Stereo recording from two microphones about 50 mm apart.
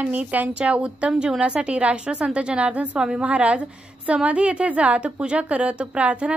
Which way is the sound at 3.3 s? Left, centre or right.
Right.